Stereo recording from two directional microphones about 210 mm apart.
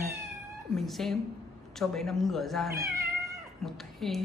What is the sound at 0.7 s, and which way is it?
Speech, centre (ahead or behind).